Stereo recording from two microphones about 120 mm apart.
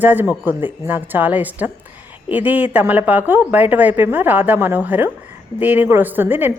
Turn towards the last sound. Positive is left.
turn(degrees=-15)  # may be behind; listen again after turning